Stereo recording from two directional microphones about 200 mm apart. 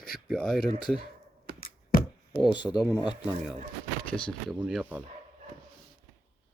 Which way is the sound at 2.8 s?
10° right (ahead or behind).